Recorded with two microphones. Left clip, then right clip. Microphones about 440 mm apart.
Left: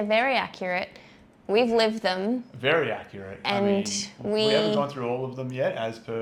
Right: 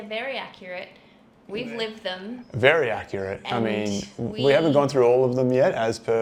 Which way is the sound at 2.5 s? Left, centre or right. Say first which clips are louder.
Right 6 dB; right.